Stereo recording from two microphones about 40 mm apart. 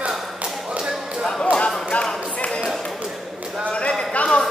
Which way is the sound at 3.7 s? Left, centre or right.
Left.